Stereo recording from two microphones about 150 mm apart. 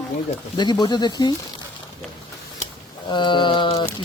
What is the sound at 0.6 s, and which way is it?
Speech, 30° left (ahead or behind).